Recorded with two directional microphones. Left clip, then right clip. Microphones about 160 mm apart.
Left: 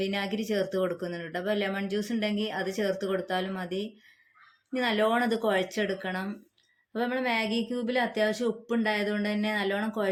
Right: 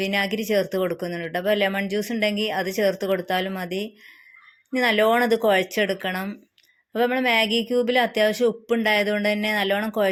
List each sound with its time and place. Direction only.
0.0 s speech: 35° right (ahead or behind)